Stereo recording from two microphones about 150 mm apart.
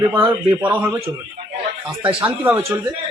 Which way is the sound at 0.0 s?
15° right (ahead or behind).